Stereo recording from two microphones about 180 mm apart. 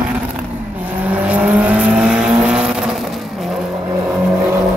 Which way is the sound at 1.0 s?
10° right (ahead or behind).